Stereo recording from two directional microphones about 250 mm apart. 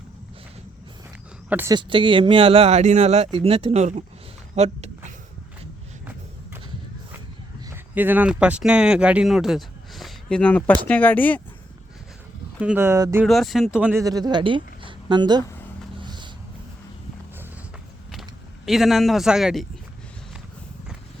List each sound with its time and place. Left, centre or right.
1.5 s speech: centre; by 4.9 s right
7.7 s speech: centre
12.5 s speech: centre
13.2 s speech: centre
16.0 s a sound: centre
18.1 s speech: centre